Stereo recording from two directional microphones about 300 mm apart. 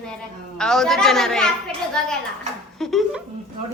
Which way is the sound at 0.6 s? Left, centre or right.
Centre.